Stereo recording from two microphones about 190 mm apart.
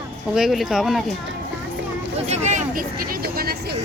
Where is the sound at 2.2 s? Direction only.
35° right (ahead or behind); by 3.8 s 55° right (ahead or behind).